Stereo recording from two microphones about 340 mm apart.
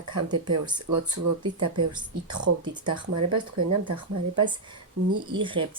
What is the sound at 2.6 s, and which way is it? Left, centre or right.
Speech, centre.